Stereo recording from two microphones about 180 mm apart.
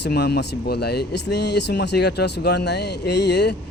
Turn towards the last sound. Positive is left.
turn(degrees=70)  # may be behind; listen again after turning